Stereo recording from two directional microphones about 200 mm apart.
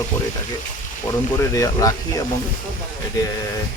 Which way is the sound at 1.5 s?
15° left (ahead or behind).